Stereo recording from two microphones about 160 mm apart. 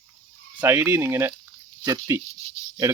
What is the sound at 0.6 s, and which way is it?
Speech, 15° right (ahead or behind).